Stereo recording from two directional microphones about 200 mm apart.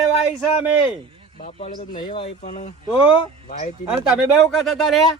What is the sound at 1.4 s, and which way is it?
Speech, 40° left (ahead or behind).